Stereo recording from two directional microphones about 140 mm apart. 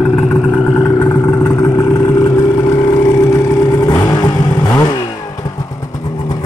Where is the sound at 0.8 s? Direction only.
20° left (ahead or behind).